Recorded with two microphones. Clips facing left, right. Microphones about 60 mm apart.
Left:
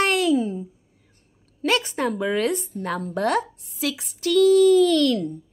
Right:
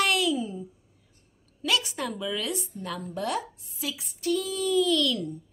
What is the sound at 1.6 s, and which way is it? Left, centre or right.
A woman's voice, left.